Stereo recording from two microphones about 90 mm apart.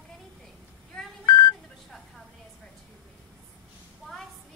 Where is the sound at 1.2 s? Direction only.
45° left (ahead or behind).